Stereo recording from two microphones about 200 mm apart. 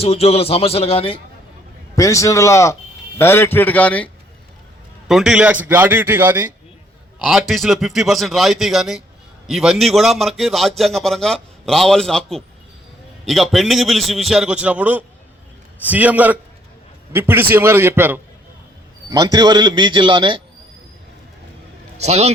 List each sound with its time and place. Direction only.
0.0 s a man's voice: 30° left (ahead or behind)
2.0 s a man's voice: 15° left (ahead or behind)
5.0 s a man's voice: 5° right (ahead or behind)
7.2 s a man's voice: centre (ahead or behind); by 20.4 s 25° right (ahead or behind)
21.9 s a man's voice: 35° right (ahead or behind)